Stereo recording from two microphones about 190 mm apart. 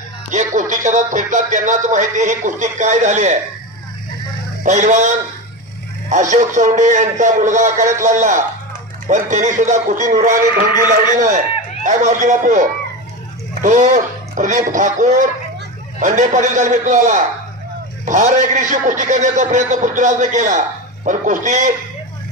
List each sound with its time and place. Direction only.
0.3 s a man's voice: 40° right (ahead or behind)
4.6 s a man's voice: 40° right (ahead or behind)